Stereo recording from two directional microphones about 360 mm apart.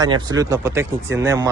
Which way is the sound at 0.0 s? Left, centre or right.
Centre.